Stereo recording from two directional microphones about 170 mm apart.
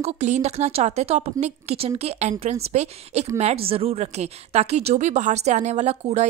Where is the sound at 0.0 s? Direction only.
40° right (ahead or behind).